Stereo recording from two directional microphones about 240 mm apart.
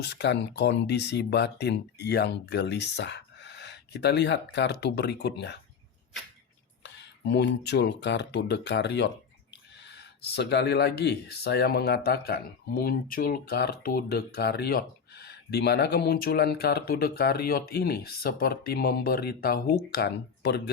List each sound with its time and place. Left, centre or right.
0.0 s speech: left
7.0 s speech: left